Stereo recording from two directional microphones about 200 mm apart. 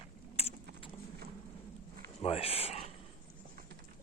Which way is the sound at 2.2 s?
30° left (ahead or behind).